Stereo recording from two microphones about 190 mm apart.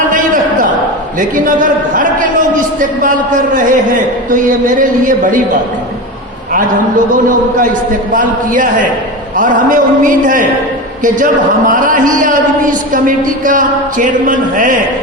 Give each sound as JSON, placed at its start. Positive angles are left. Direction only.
{"t": 1.5, "sound": "a man's voice", "side_deg": -45}
{"t": 8.1, "sound": "a man's voice", "side_deg": -45}
{"t": 11.7, "sound": "a man's voice", "side_deg": -45}